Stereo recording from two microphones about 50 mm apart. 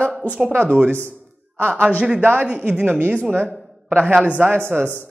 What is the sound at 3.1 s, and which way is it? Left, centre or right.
A man's voice, right.